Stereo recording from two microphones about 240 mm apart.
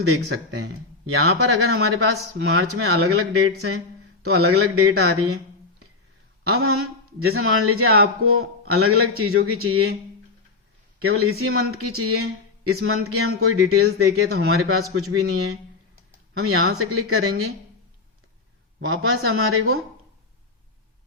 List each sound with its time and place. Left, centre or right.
0.1 s a man's voice: right
6.5 s a man's voice: right
11.0 s a man's voice: right
18.9 s a man's voice: right